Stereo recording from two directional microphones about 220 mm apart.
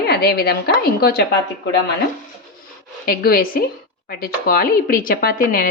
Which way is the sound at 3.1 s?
45° left (ahead or behind).